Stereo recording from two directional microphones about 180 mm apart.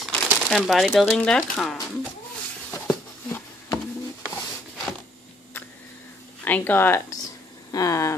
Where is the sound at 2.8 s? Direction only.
10° left (ahead or behind).